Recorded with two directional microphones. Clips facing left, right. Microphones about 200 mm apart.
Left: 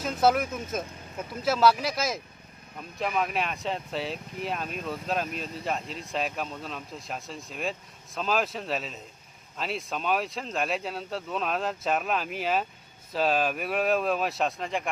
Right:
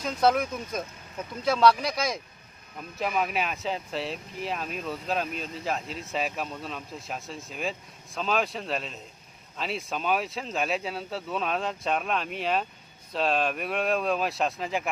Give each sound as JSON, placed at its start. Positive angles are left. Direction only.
{"t": 0.0, "sound": "speech", "side_deg": 5}